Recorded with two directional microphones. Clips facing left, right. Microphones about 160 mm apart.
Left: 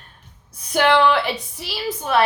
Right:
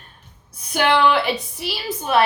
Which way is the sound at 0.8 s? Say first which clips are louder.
Left 1 dB; 15° right (ahead or behind).